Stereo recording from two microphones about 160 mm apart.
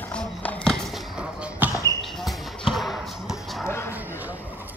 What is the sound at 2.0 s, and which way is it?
Basketball bounce, centre (ahead or behind).